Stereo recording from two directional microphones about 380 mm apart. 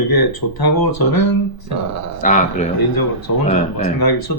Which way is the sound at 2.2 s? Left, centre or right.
Centre.